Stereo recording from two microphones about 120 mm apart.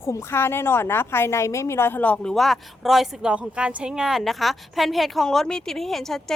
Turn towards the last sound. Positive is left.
turn(degrees=5)  # may be behind; listen again after turning